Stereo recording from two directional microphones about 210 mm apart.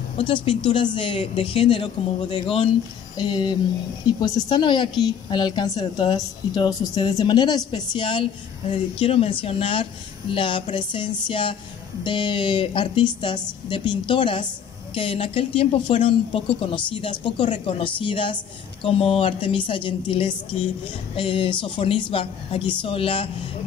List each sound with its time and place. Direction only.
0.2 s a woman's voice: 25° left (ahead or behind)